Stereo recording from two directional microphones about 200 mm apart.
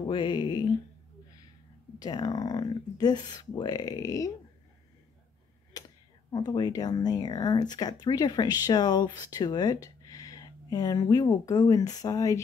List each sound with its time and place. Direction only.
0.1 s speech: 25° left (ahead or behind)
2.0 s speech: 20° left (ahead or behind)
6.3 s speech: 20° left (ahead or behind)